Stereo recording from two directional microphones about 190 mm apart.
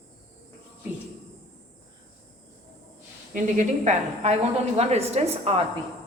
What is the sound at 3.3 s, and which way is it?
A woman's voice, 40° right (ahead or behind).